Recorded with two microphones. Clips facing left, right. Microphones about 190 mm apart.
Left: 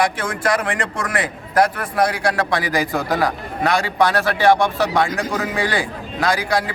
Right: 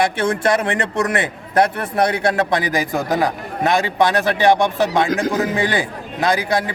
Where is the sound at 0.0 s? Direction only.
25° right (ahead or behind).